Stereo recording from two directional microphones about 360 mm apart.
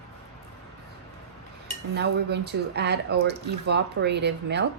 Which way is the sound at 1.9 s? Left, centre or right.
Right.